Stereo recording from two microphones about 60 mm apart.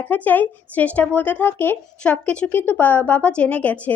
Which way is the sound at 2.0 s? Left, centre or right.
Left.